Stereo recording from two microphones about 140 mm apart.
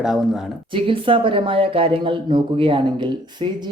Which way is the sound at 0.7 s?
40° right (ahead or behind).